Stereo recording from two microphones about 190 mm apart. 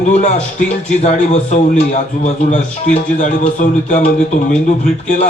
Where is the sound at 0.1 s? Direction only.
35° left (ahead or behind).